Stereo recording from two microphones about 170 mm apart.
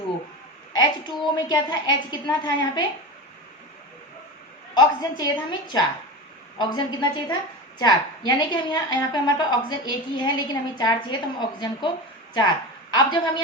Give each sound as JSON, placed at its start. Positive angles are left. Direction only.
{"t": 0.8, "sound": "a woman's voice", "side_deg": 25}
{"t": 4.7, "sound": "a woman's voice", "side_deg": 25}